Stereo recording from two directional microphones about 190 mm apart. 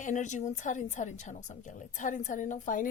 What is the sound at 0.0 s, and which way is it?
A woman's voice, 40° left (ahead or behind).